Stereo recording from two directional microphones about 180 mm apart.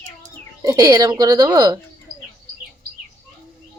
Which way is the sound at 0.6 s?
20° right (ahead or behind).